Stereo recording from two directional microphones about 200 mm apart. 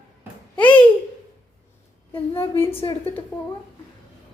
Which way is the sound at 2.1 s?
25° left (ahead or behind).